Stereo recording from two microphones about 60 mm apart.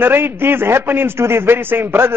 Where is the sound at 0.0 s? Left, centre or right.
Right.